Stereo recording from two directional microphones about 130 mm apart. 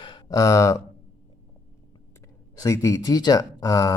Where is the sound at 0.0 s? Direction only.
35° left (ahead or behind).